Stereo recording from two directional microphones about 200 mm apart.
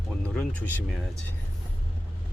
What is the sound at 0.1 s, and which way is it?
Speech, 5° left (ahead or behind).